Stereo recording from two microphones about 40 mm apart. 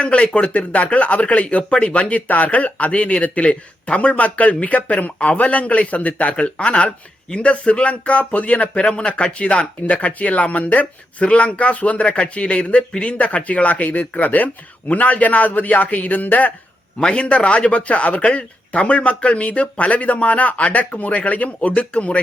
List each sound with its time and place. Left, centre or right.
0.0 s speech: left
17.0 s speech: left